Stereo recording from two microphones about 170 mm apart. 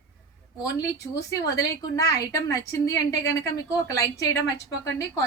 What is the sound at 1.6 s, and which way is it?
A woman's voice, 20° left (ahead or behind).